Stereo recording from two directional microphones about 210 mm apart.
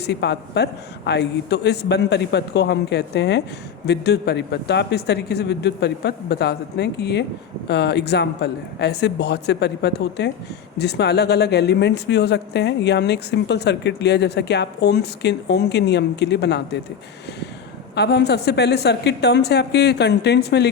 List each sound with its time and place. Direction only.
0.0 s a man's voice: 55° left (ahead or behind)
17.9 s a man's voice: 50° left (ahead or behind)